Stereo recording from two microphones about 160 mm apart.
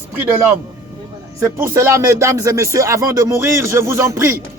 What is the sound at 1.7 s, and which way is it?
Speech, 20° right (ahead or behind).